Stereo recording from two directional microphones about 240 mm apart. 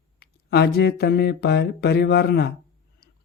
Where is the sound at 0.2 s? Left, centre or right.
Left.